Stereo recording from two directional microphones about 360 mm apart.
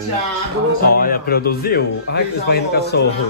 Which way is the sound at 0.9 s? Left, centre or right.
Left.